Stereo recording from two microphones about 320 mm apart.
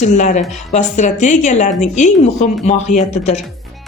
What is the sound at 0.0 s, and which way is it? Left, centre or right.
A woman's voice, left.